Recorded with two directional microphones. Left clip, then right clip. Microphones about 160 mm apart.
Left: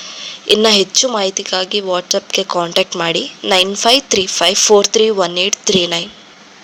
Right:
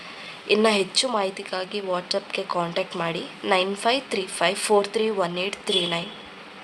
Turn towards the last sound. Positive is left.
turn(degrees=35)  # may be behind; listen again after turning